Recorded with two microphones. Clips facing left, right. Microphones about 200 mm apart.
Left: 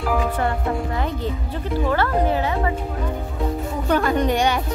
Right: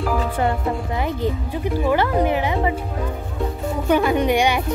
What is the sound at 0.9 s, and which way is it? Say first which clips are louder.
Speech: right 2 dB; 15° right (ahead or behind).